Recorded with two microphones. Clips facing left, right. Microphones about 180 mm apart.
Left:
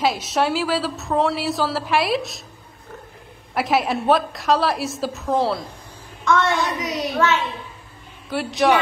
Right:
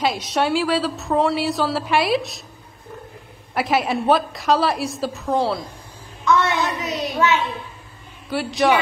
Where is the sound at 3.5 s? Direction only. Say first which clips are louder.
Even; centre (ahead or behind).